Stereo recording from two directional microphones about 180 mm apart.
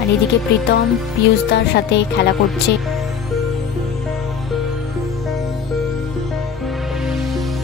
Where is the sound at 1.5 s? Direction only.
70° left (ahead or behind).